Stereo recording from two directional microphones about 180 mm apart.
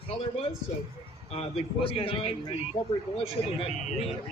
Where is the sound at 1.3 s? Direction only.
35° left (ahead or behind).